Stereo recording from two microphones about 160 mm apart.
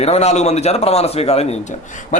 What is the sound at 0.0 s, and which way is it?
A man's voice, 40° left (ahead or behind).